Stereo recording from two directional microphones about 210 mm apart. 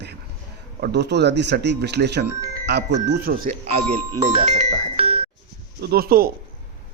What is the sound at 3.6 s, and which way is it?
Speech, 30° right (ahead or behind).